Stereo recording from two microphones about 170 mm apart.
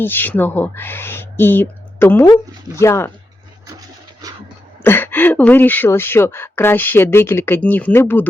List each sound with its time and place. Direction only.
0.0 s speech: 10° left (ahead or behind)
4.8 s speech: 10° left (ahead or behind)